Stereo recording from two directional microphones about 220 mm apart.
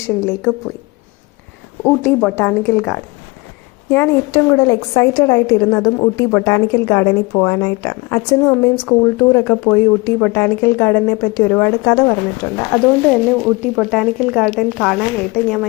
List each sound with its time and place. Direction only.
0.2 s a woman's voice: 10° left (ahead or behind)
2.0 s a woman's voice: 10° left (ahead or behind)
12.8 s speech: 5° right (ahead or behind)